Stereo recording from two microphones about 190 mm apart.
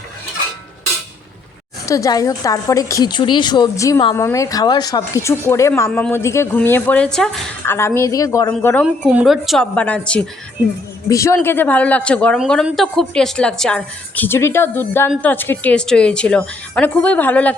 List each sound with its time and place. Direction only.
1.9 s a woman's voice: 20° left (ahead or behind)
8.8 s a woman's voice: centre (ahead or behind)